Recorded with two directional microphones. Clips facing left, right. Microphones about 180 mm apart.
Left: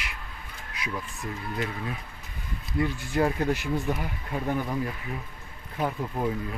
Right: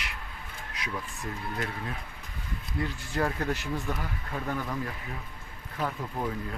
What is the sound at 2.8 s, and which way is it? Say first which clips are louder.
Speech: left 5 dB; 15° left (ahead or behind).